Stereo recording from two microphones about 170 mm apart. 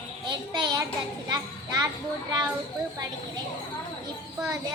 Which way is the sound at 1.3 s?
20° right (ahead or behind).